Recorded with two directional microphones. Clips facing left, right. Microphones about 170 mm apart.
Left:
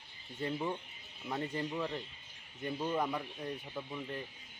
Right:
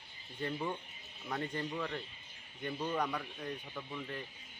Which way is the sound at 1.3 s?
20° left (ahead or behind).